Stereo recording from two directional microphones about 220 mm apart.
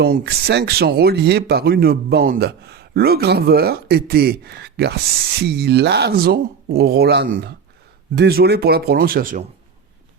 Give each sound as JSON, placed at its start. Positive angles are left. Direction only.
{"t": 0.0, "sound": "speech", "side_deg": -45}